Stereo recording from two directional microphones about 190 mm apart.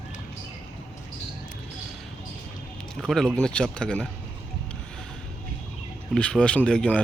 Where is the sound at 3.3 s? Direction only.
5° left (ahead or behind).